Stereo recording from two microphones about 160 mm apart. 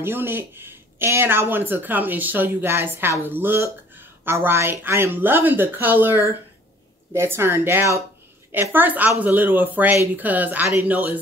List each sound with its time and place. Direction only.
0.0 s speech: 15° right (ahead or behind)